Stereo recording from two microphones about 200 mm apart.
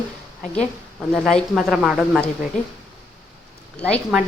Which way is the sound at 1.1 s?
5° left (ahead or behind).